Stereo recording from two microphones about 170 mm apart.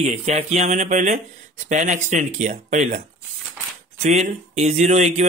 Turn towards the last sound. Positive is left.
turn(degrees=-40)  # may be behind; listen again after turning